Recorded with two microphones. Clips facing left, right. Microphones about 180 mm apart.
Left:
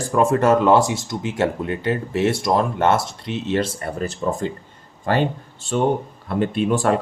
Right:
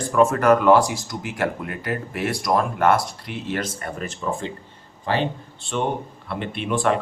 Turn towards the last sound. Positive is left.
turn(degrees=40)  # may be behind; listen again after turning